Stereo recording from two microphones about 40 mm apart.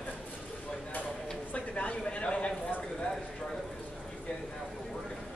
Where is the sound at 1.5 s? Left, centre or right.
Left.